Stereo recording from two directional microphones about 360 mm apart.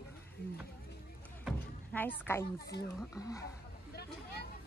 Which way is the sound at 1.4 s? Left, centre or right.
Centre.